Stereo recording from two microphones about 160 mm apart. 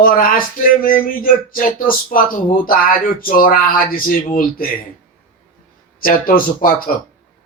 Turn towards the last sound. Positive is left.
turn(degrees=60)  # may be behind; listen again after turning